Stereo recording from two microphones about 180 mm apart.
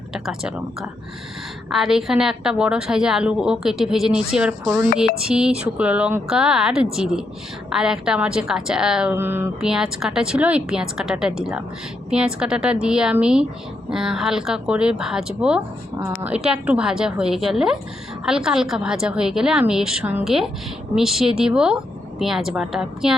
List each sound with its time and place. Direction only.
0.1 s a woman's voice: 5° right (ahead or behind)
16.0 s speech: 20° right (ahead or behind)
16.3 s a woman's voice: 5° right (ahead or behind)